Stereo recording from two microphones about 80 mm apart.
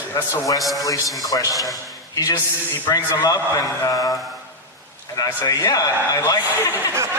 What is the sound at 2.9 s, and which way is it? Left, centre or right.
A man's voice, left.